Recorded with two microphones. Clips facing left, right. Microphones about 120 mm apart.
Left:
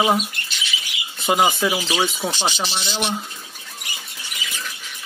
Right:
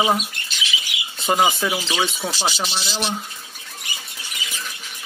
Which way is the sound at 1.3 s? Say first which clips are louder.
Left 1 dB; centre (ahead or behind).